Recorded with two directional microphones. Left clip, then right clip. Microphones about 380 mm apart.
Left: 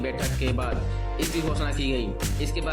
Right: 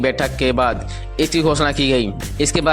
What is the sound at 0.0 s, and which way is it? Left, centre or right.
Speech, right.